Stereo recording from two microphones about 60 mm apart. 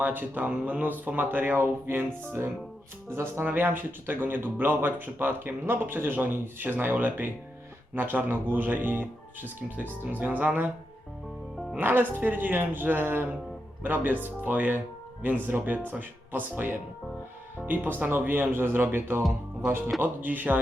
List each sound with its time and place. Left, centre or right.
0.0 s speech: right
3.4 s speech: right
11.8 s speech: right